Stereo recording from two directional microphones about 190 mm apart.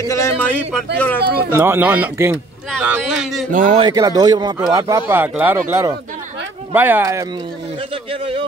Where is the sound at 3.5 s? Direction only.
45° right (ahead or behind).